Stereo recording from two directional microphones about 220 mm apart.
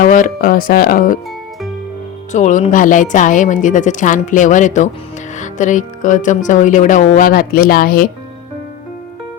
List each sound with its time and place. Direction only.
0.0 s speech: 35° left (ahead or behind)
2.3 s speech: 35° left (ahead or behind)